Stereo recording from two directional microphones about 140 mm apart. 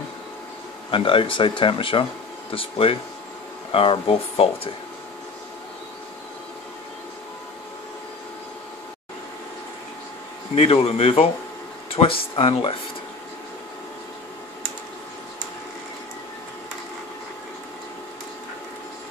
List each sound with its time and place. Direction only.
0.9 s speech: 35° left (ahead or behind)
10.5 s speech: 45° left (ahead or behind)